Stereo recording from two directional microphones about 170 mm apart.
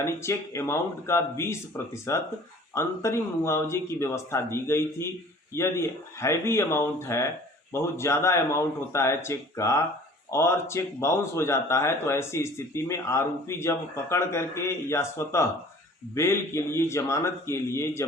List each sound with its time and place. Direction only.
0.0 s speech: 15° left (ahead or behind)